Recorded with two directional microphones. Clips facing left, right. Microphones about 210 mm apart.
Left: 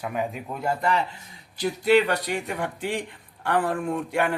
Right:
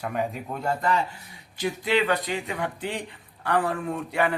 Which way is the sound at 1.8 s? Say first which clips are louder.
Left 5 dB; 45° left (ahead or behind).